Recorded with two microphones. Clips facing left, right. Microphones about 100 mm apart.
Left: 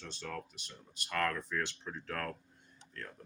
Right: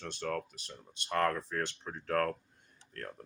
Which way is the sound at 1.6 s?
45° right (ahead or behind).